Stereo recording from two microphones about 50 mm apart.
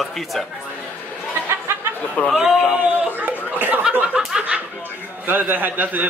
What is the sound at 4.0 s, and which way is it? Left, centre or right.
Snicker, centre.